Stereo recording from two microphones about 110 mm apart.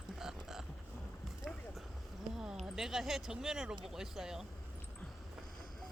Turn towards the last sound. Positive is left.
turn(degrees=-5)  # may be behind; listen again after turning